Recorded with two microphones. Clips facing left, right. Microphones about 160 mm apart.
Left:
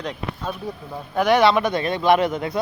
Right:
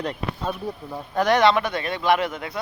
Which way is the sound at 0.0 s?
5° right (ahead or behind).